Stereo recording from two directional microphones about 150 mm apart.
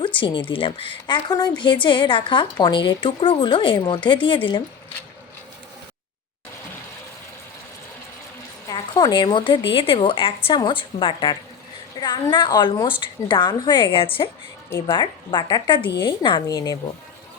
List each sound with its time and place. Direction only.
0.2 s a woman's voice: 35° left (ahead or behind)
8.7 s a woman's voice: 30° left (ahead or behind)
14.7 s a woman's voice: 25° left (ahead or behind)